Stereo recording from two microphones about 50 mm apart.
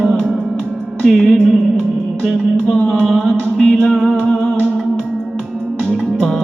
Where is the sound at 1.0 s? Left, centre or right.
Centre.